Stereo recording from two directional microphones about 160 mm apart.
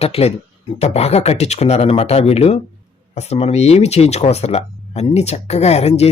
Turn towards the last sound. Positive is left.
turn(degrees=40)  # may be behind; listen again after turning